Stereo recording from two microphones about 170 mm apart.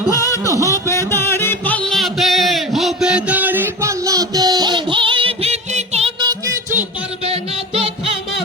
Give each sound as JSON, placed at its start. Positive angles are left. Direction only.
{"t": 0.1, "sound": "music", "side_deg": 20}
{"t": 0.4, "sound": "music", "side_deg": -20}
{"t": 0.7, "sound": "music", "side_deg": 15}
{"t": 7.3, "sound": "music", "side_deg": -35}